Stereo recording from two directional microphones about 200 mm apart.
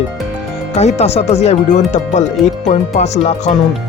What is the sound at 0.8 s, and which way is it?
Speech, 35° left (ahead or behind).